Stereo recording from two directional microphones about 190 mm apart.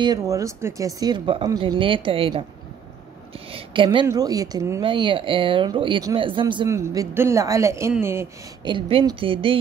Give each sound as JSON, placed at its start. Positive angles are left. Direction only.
{"t": 0.0, "sound": "a woman's voice", "side_deg": -20}
{"t": 8.6, "sound": "a woman's voice", "side_deg": -25}